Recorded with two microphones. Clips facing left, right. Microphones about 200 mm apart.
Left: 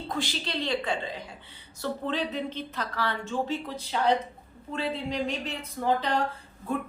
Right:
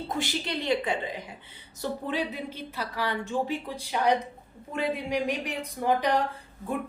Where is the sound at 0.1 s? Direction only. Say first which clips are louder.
Even; 20° right (ahead or behind).